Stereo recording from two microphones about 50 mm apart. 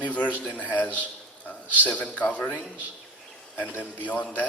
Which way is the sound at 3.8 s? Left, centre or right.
Left.